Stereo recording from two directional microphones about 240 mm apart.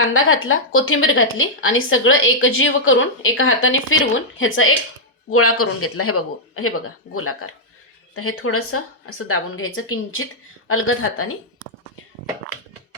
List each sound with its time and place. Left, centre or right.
0.1 s a woman's voice: left